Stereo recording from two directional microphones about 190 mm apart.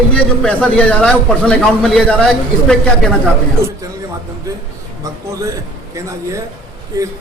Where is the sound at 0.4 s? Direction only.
10° left (ahead or behind).